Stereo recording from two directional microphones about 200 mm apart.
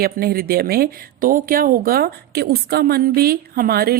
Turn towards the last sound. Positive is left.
turn(degrees=-50)  # may be behind; listen again after turning